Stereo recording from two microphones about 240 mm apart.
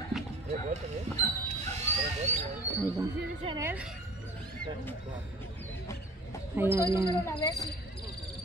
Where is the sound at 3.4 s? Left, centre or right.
Centre.